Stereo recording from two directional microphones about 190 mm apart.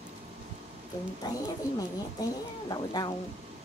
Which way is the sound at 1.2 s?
20° left (ahead or behind).